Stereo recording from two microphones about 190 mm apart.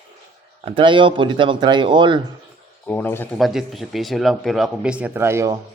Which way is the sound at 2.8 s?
10° left (ahead or behind).